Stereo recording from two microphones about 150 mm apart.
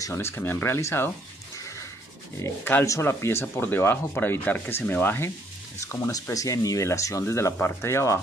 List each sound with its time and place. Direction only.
0.0 s speech: 20° left (ahead or behind)
2.4 s speech: 15° left (ahead or behind)